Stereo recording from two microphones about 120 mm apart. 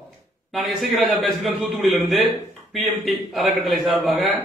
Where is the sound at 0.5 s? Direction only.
Centre (ahead or behind).